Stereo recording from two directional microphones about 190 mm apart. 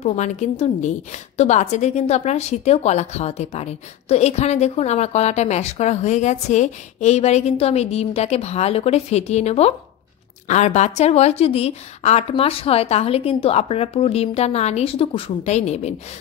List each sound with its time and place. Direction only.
0.0 s a woman's voice: 35° left (ahead or behind)